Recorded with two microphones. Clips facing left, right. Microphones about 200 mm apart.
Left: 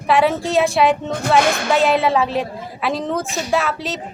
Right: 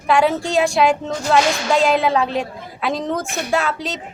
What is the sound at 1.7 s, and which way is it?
A woman's voice, centre (ahead or behind).